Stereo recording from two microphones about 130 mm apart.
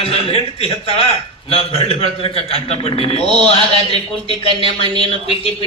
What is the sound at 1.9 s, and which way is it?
A man's voice, 45° left (ahead or behind).